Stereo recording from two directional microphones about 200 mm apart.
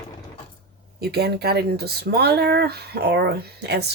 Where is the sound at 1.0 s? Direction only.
55° right (ahead or behind).